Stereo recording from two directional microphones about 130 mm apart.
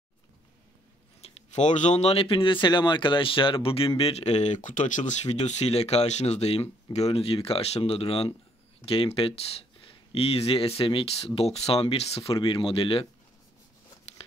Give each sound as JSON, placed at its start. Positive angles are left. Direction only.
{"t": 1.2, "sound": "speech", "side_deg": 65}